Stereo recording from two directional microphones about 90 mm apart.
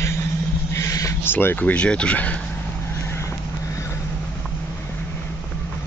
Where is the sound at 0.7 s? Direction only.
35° left (ahead or behind).